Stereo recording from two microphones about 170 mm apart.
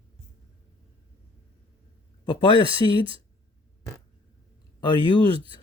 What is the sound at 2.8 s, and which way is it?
Speech, 25° left (ahead or behind).